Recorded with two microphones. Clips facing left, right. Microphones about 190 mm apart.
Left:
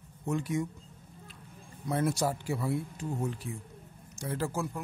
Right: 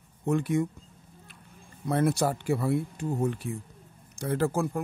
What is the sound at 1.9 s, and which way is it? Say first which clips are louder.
Speech: right 4 dB; 60° right (ahead or behind).